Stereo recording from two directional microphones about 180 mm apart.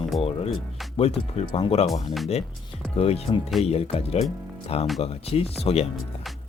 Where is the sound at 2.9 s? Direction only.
35° left (ahead or behind).